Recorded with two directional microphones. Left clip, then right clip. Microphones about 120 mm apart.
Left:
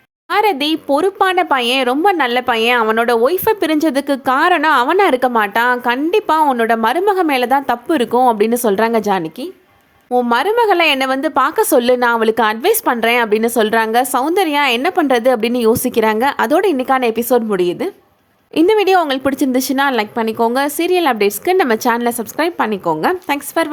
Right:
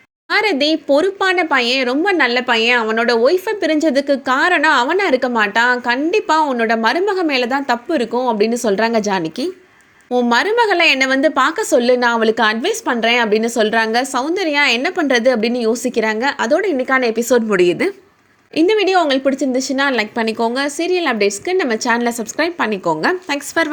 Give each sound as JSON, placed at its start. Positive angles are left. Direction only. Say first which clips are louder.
{"t": 0.3, "sound": "a woman's voice", "louder": "left 1 dB", "side_deg": 20}
{"t": 1.3, "sound": "a woman's voice", "louder": "left 1 dB", "side_deg": 30}
{"t": 8.4, "sound": "a woman's voice", "louder": "left 2 dB", "side_deg": 30}
{"t": 16.7, "sound": "a woman's voice", "louder": "left 1 dB", "side_deg": 30}
{"t": 17.2, "sound": "a woman's voice", "louder": "even", "side_deg": 15}
{"t": 17.6, "sound": "a woman's voice", "louder": "right 3 dB", "side_deg": 5}
{"t": 18.5, "sound": "a woman's voice", "louder": "left 2 dB", "side_deg": 35}
{"t": 21.8, "sound": "a woman's voice", "louder": "left 1 dB", "side_deg": 20}